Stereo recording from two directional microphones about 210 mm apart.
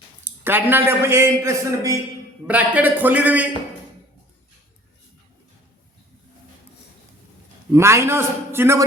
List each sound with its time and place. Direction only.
0.3 s a man's voice: 10° right (ahead or behind)
7.7 s a man's voice: 15° right (ahead or behind)